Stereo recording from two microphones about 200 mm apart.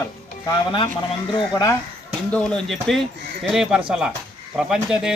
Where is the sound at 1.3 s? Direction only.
15° left (ahead or behind).